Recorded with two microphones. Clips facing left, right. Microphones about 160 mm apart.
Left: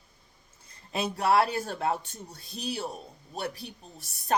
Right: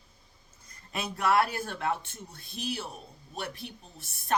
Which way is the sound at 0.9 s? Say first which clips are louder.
Left 2 dB; 30° left (ahead or behind).